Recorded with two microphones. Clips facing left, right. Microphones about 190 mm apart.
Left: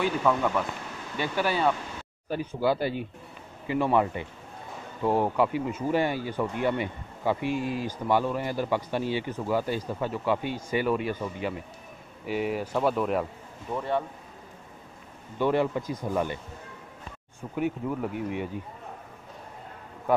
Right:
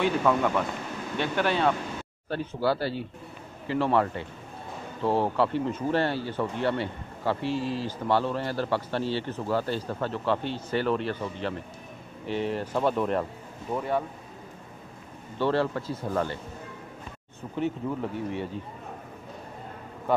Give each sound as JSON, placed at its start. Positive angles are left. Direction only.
{"t": 0.0, "sound": "a man's voice", "side_deg": 0}
{"t": 15.3, "sound": "a man's voice", "side_deg": 15}
{"t": 17.6, "sound": "a man's voice", "side_deg": 10}